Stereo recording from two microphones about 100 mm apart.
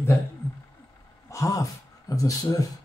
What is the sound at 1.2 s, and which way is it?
Speech, 35° left (ahead or behind).